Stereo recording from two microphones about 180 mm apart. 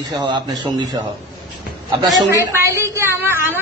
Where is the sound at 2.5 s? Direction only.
15° right (ahead or behind).